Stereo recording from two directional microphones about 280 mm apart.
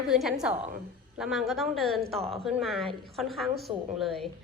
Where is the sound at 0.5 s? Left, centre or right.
Right.